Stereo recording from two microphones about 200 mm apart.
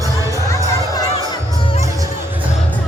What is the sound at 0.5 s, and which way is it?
Music, 20° left (ahead or behind).